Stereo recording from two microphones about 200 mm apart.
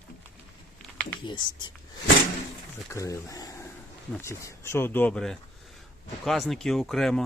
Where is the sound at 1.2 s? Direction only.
20° left (ahead or behind).